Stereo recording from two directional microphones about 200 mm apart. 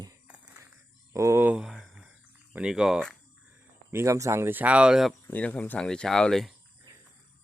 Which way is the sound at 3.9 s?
15° right (ahead or behind).